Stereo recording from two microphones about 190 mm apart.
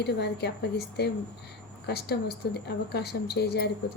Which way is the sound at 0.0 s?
60° left (ahead or behind).